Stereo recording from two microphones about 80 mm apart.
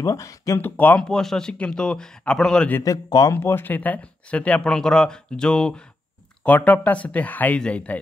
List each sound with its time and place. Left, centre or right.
0.0 s speech: left
0.6 s speech: left
1.0 s speech: centre
2.8 s speech: left
3.3 s speech: left